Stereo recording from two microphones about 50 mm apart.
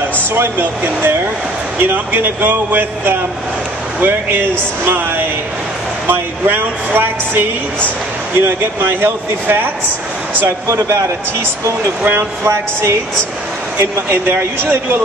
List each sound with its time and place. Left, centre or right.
0.3 s speech: right
12.1 s speech: right